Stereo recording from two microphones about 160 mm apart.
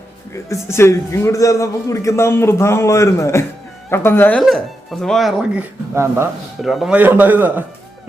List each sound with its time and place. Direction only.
0.4 s speech: 15° left (ahead or behind); by 6.2 s 15° right (ahead or behind)
6.6 s speech: centre (ahead or behind)